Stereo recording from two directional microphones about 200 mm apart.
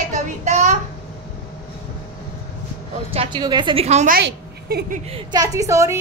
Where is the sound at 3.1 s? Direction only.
25° right (ahead or behind).